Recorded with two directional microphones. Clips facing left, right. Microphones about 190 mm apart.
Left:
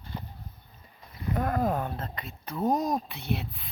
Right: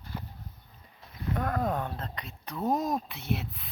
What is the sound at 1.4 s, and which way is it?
Speech, 5° left (ahead or behind).